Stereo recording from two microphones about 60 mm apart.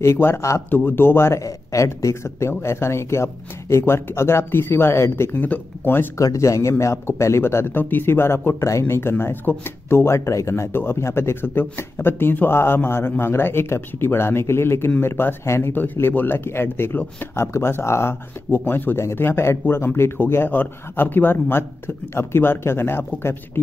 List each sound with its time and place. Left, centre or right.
0.0 s speech: left
0.7 s speech: left
1.4 s a man's voice: left
2.2 s speech: left
6.1 s a man's voice: left
15.7 s speech: left
18.5 s speech: left
19.1 s speech: left